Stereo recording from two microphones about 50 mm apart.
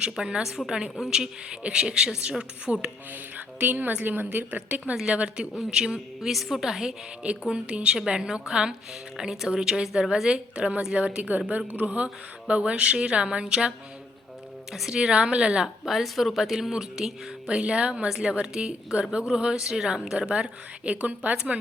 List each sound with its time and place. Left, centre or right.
0.0 s speech: centre
0.9 s speech: centre
3.3 s a woman's voice: right
5.1 s speech: right
7.2 s speech: right
15.8 s a woman's voice: centre
17.5 s speech: right